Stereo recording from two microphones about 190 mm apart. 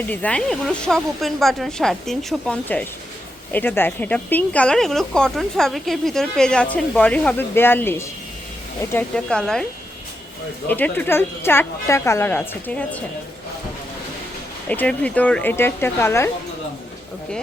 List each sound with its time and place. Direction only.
0.1 s speech: 5° left (ahead or behind)
10.7 s speech: 10° left (ahead or behind)
14.7 s speech: 5° left (ahead or behind)